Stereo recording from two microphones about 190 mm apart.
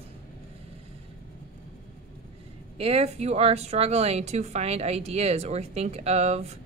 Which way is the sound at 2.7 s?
35° right (ahead or behind).